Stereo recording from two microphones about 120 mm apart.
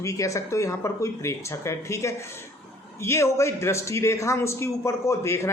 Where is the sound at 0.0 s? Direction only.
25° left (ahead or behind).